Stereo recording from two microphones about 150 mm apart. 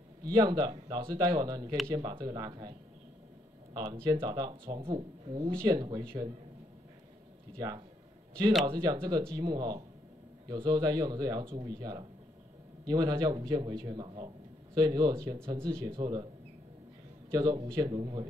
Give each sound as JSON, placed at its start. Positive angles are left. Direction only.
{"t": 0.3, "sound": "a man's voice", "side_deg": -25}
{"t": 3.7, "sound": "a man's voice", "side_deg": -25}
{"t": 7.5, "sound": "a man's voice", "side_deg": -25}
{"t": 17.3, "sound": "a man's voice", "side_deg": -25}